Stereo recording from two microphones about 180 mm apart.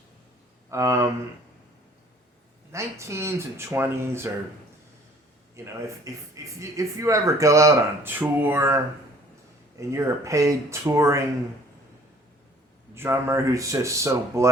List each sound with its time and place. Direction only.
0.7 s speech: 15° right (ahead or behind)
2.7 s speech: 15° right (ahead or behind)
5.6 s speech: 15° right (ahead or behind)
12.9 s speech: 15° right (ahead or behind)